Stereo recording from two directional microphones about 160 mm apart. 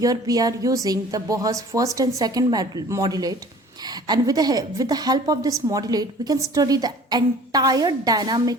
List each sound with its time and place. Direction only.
0.0 s a woman's voice: 20° right (ahead or behind)